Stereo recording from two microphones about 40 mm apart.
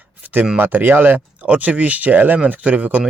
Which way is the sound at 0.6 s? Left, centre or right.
Right.